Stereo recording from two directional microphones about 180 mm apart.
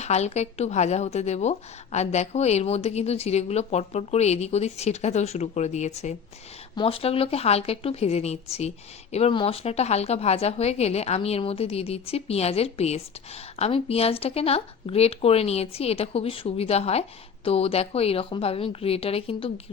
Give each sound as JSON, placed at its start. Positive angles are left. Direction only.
{"t": 0.0, "sound": "speech", "side_deg": 40}